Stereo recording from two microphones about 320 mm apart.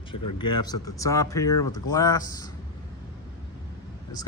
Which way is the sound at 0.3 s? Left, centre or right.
Centre.